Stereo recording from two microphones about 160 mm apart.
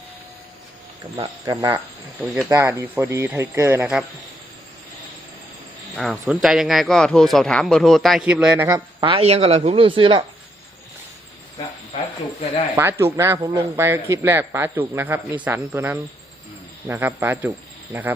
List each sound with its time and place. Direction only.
1.1 s speech: 30° right (ahead or behind)
2.2 s a man's voice: 10° right (ahead or behind)
6.2 s speech: 5° right (ahead or behind)
8.6 s speech: 25° right (ahead or behind)
12.7 s a man's voice: 15° right (ahead or behind)